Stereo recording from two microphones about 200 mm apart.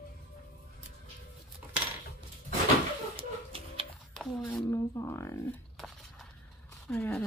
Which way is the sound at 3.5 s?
30° right (ahead or behind).